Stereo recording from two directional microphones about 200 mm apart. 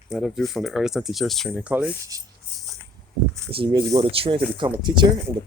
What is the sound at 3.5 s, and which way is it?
Speech, 25° right (ahead or behind).